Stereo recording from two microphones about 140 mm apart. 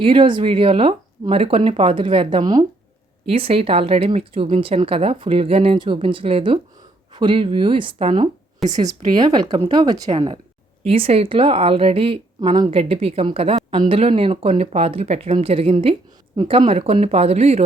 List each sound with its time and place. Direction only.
0.0 s speech: 40° right (ahead or behind)
3.2 s speech: 45° right (ahead or behind)
8.6 s a woman's voice: centre (ahead or behind)
9.1 s speech: 30° right (ahead or behind); by 17.6 s 50° right (ahead or behind)